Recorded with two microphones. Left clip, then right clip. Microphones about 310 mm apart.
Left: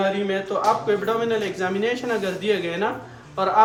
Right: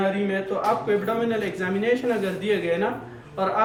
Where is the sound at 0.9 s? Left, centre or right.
Centre.